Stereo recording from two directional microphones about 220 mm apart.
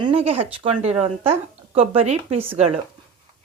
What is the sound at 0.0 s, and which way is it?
A woman's voice, 25° right (ahead or behind).